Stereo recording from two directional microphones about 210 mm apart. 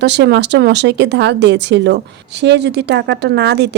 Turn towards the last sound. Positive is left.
turn(degrees=-55)  # may be behind; listen again after turning